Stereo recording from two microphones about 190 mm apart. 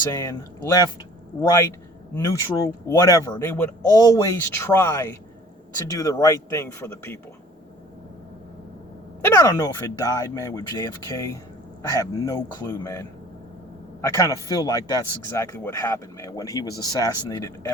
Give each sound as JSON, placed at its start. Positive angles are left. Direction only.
{"t": 0.1, "sound": "speech", "side_deg": 15}
{"t": 9.2, "sound": "speech", "side_deg": 15}